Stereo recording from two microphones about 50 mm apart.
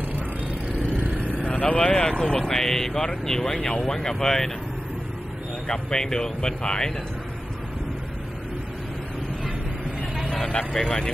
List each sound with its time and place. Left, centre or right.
0.9 s vehicle: right
1.5 s speech: left; by 4.5 s centre
5.7 s speech: centre
10.3 s speech: centre